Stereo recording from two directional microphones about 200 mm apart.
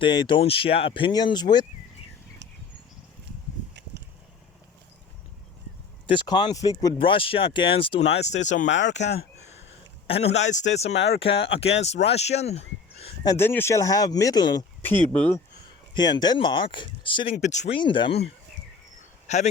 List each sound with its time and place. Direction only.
0.0 s speech: 20° left (ahead or behind)
6.1 s speech: 20° left (ahead or behind); by 8.6 s 35° left (ahead or behind)
8.6 s speech: 65° left (ahead or behind)
10.1 s speech: 30° left (ahead or behind)
10.8 s speech: 60° left (ahead or behind)
11.6 s speech: 35° left (ahead or behind)
13.2 s speech: 10° left (ahead or behind)
16.0 s speech: 20° left (ahead or behind)
17.3 s speech: 35° left (ahead or behind)
17.7 s speech: 25° left (ahead or behind)
19.3 s speech: 35° left (ahead or behind)